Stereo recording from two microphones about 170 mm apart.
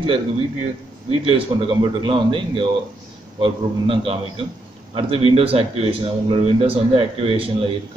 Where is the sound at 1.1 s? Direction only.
30° right (ahead or behind).